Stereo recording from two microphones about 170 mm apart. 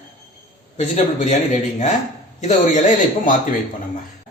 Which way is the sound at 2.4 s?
45° left (ahead or behind).